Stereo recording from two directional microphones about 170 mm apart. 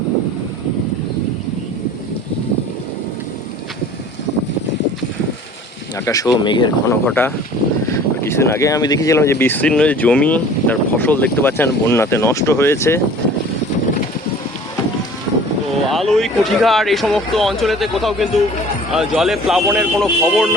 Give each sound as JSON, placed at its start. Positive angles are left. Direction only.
{"t": 6.1, "sound": "speech", "side_deg": 20}
{"t": 6.9, "sound": "speech", "side_deg": 10}
{"t": 15.9, "sound": "speech", "side_deg": 0}